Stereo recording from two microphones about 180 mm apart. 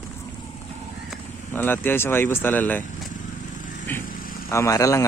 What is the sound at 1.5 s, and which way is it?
Speech, 10° left (ahead or behind).